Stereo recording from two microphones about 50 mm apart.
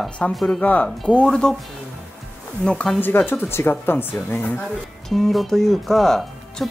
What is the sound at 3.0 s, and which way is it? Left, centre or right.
Speech, left.